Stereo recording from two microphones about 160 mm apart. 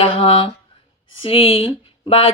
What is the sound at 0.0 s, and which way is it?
A woman's voice, 30° left (ahead or behind).